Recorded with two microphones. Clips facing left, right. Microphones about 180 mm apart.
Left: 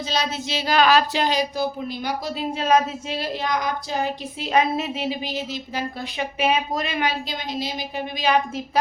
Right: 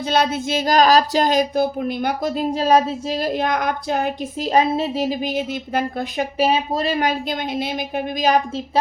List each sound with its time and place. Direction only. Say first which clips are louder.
0.0 s speech: right 7 dB; 55° right (ahead or behind)
4.4 s a woman's voice: right 3 dB; 40° right (ahead or behind)
6.4 s speech: right 3 dB; 35° right (ahead or behind)